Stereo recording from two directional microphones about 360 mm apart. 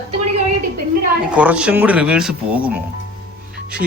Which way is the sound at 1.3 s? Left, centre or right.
Centre.